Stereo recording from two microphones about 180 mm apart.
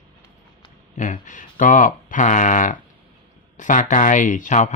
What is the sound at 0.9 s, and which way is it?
Speech, 45° left (ahead or behind).